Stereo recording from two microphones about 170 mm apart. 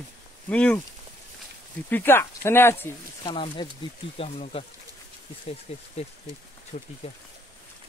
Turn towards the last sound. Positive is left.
turn(degrees=45)  # may be behind; listen again after turning